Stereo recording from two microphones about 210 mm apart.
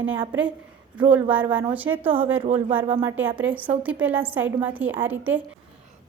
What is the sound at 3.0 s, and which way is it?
A woman's voice, 10° right (ahead or behind).